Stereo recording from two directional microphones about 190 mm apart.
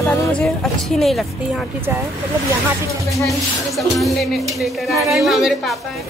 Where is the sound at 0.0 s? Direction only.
10° left (ahead or behind).